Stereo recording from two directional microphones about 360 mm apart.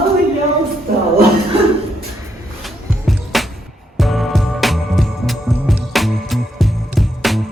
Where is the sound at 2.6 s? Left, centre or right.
Centre.